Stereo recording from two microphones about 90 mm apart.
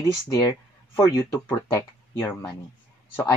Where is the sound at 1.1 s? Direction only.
40° left (ahead or behind).